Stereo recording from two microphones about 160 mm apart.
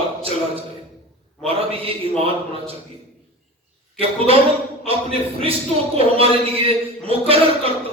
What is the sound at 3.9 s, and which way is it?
Speech, 35° right (ahead or behind).